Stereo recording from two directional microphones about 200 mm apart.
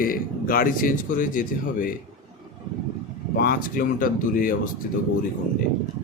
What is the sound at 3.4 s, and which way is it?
Speech, 45° left (ahead or behind).